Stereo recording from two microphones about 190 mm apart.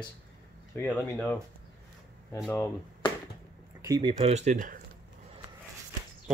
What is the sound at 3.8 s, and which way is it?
Speech, 20° right (ahead or behind).